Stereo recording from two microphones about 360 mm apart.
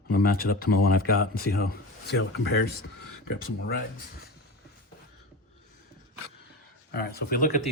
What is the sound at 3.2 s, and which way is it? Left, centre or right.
Speech, left.